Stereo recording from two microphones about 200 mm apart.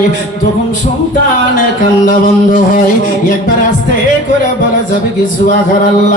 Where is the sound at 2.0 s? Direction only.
40° left (ahead or behind).